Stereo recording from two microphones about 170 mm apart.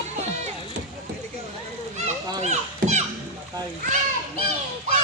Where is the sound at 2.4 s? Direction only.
40° right (ahead or behind).